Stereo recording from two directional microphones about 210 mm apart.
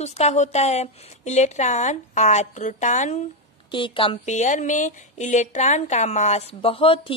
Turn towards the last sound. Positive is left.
turn(degrees=25)  # may be behind; listen again after turning